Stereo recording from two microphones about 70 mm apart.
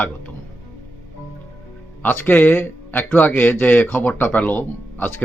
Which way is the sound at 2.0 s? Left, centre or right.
Left.